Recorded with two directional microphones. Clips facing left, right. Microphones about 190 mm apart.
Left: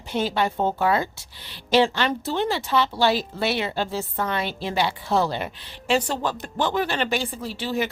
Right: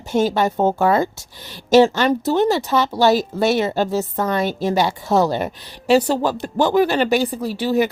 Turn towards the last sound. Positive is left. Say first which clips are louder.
# right 8 dB
turn(degrees=-40)  # may be behind; listen again after turning